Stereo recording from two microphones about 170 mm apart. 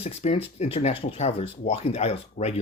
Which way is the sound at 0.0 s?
35° left (ahead or behind).